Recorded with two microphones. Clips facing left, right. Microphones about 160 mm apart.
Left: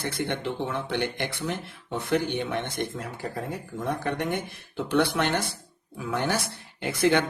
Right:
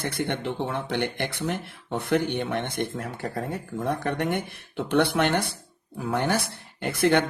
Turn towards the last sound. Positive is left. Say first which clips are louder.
# right 1 dB
turn(degrees=-60)  # may be behind; listen again after turning